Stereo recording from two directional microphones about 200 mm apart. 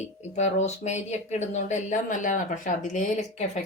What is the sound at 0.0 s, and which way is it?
Speech, 35° left (ahead or behind).